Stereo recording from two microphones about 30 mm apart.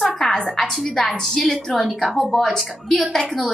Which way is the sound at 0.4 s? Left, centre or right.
Centre.